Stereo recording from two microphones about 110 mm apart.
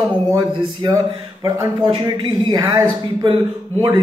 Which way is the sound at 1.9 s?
45° right (ahead or behind).